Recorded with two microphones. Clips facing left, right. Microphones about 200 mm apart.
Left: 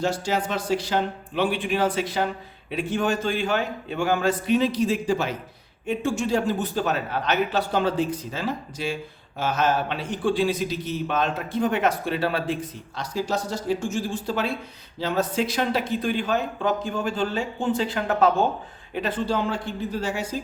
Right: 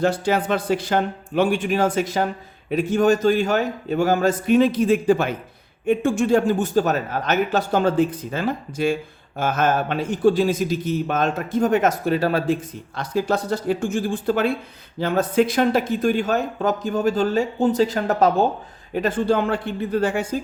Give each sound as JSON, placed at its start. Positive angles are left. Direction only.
{"t": 0.0, "sound": "speech", "side_deg": -60}
{"t": 13.0, "sound": "speech", "side_deg": -55}